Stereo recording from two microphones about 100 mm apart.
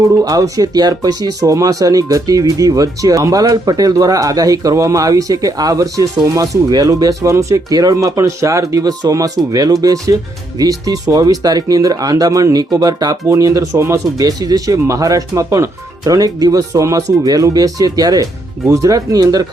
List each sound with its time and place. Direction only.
0.2 s speech: 35° right (ahead or behind)
16.0 s speech: 40° right (ahead or behind)